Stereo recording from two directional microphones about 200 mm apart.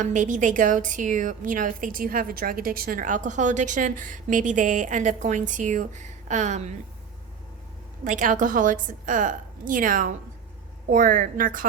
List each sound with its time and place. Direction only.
0.0 s a woman's voice: 40° right (ahead or behind)
8.0 s a woman's voice: 40° right (ahead or behind)